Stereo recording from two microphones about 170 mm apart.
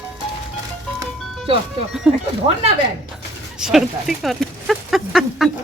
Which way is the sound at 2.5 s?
25° right (ahead or behind).